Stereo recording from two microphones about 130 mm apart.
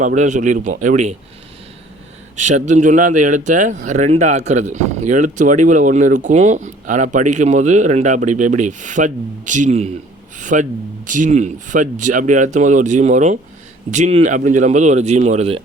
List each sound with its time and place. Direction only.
0.0 s speech: 70° right (ahead or behind)
2.3 s speech: 70° right (ahead or behind)
10.3 s speech: 75° right (ahead or behind); by 15.6 s 50° right (ahead or behind)